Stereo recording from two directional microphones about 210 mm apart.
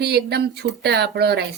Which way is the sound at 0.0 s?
50° right (ahead or behind).